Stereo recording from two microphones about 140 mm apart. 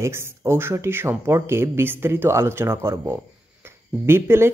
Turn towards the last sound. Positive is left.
turn(degrees=-15)  # may be behind; listen again after turning